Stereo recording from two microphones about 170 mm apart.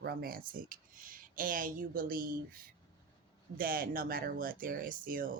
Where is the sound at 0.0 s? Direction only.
60° right (ahead or behind).